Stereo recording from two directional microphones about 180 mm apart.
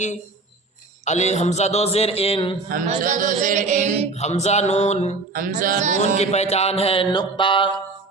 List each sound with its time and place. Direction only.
1.0 s a man's voice: 40° left (ahead or behind)
2.6 s mantra: 50° right (ahead or behind)
4.2 s a man's voice: 40° left (ahead or behind)
5.3 s mantra: 50° right (ahead or behind)
6.1 s a man's voice: 35° left (ahead or behind)